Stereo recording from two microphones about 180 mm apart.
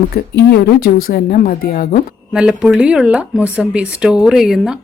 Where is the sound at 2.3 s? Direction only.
5° right (ahead or behind).